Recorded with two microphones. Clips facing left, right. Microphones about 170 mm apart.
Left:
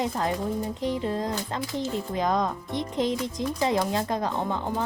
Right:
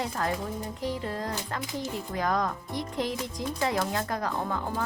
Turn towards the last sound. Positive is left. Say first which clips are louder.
# left 3 dB
turn(degrees=20)  # may be behind; listen again after turning